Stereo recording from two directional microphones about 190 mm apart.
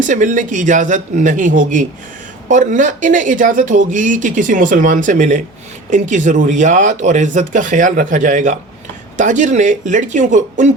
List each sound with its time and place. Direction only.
0.0 s speech: 40° right (ahead or behind)